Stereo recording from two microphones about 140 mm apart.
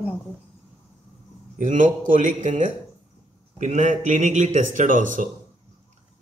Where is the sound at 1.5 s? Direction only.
65° right (ahead or behind).